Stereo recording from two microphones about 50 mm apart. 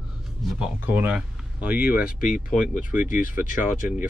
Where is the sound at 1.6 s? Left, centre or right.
Right.